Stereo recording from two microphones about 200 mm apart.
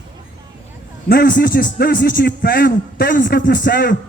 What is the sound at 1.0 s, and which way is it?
A man's voice, 50° left (ahead or behind).